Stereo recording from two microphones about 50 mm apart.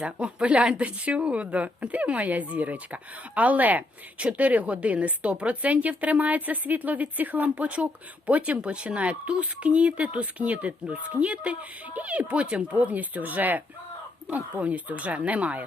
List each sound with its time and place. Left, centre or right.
0.0 s speech: right